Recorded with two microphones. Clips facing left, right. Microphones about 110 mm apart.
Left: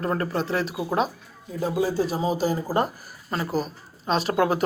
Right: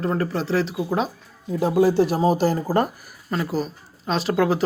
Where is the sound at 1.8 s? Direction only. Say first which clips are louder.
Right 7 dB; 65° right (ahead or behind).